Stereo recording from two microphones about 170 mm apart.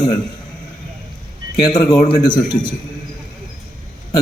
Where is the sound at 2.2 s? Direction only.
25° left (ahead or behind).